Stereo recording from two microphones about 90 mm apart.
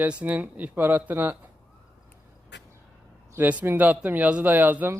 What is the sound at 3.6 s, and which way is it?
A man's voice, 20° right (ahead or behind).